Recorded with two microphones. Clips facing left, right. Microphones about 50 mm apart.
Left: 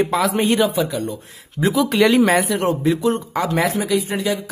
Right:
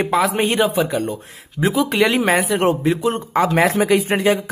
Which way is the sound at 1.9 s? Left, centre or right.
Right.